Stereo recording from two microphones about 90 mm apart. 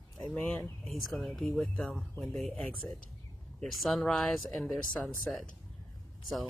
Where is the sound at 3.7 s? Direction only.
Centre (ahead or behind).